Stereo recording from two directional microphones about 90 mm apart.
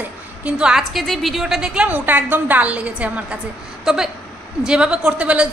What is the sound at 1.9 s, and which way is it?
A woman's voice, 20° right (ahead or behind).